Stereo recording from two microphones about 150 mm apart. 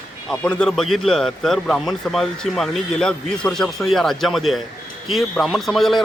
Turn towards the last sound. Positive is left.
turn(degrees=0)  # may be behind; listen again after turning